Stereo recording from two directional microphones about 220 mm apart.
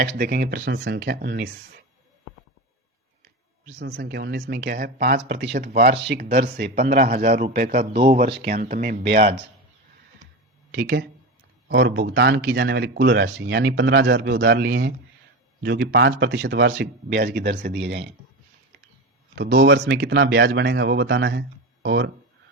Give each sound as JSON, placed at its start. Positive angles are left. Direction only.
{"t": 0.0, "sound": "speech", "side_deg": -45}
{"t": 3.8, "sound": "speech", "side_deg": -45}
{"t": 10.7, "sound": "speech", "side_deg": -50}
{"t": 19.4, "sound": "speech", "side_deg": -50}